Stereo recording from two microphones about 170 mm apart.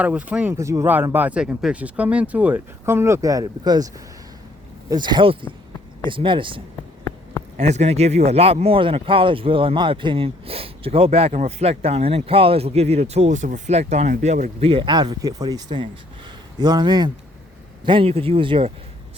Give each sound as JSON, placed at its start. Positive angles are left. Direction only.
{"t": 0.0, "sound": "speech", "side_deg": -10}
{"t": 7.5, "sound": "speech", "side_deg": -40}
{"t": 14.7, "sound": "speech", "side_deg": -30}